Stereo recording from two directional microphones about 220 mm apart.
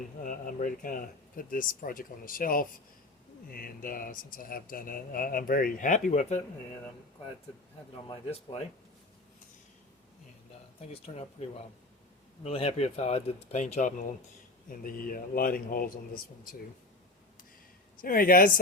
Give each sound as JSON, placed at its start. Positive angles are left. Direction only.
{"t": 0.2, "sound": "speech", "side_deg": 35}
{"t": 8.0, "sound": "speech", "side_deg": 25}
{"t": 10.8, "sound": "speech", "side_deg": 25}
{"t": 18.0, "sound": "speech", "side_deg": 40}